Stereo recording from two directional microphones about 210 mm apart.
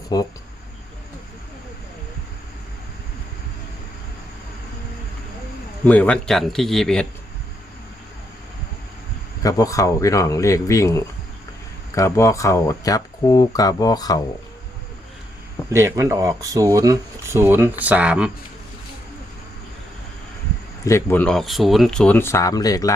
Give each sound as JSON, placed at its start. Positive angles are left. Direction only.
{"t": 0.1, "sound": "speech", "side_deg": 15}
{"t": 5.8, "sound": "speech", "side_deg": 5}
{"t": 9.4, "sound": "speech", "side_deg": 15}
{"t": 15.7, "sound": "speech", "side_deg": -15}
{"t": 20.8, "sound": "speech", "side_deg": 10}